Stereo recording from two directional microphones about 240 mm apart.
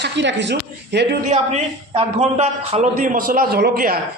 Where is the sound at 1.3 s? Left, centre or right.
Right.